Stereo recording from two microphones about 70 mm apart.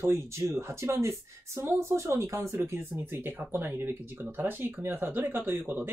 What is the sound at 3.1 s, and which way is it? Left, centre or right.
Speech, right.